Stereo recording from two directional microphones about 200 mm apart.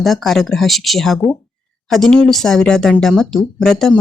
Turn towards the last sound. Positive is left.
turn(degrees=0)  # may be behind; listen again after turning